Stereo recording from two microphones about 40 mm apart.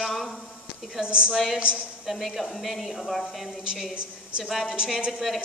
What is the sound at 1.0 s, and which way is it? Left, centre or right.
Speech, right.